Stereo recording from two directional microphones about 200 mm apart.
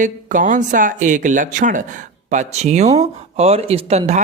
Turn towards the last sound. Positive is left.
turn(degrees=-30)  # may be behind; listen again after turning